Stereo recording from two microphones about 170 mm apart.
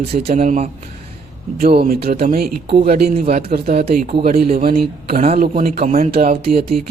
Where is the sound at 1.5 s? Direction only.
65° right (ahead or behind).